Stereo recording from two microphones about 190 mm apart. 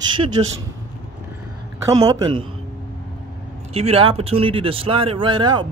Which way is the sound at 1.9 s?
20° right (ahead or behind).